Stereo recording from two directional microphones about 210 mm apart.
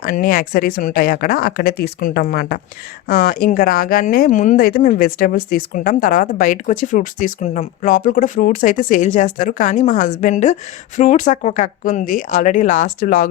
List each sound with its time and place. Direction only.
0.0 s speech: 40° left (ahead or behind)